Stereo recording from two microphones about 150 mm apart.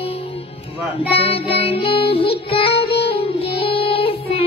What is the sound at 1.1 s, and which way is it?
Music, 40° left (ahead or behind).